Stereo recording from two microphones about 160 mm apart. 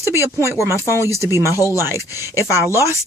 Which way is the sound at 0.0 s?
15° right (ahead or behind).